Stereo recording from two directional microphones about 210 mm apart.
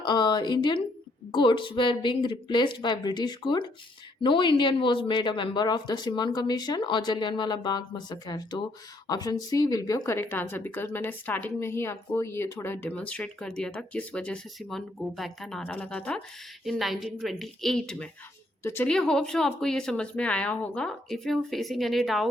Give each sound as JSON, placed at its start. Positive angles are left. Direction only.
{"t": 0.0, "sound": "speech", "side_deg": 20}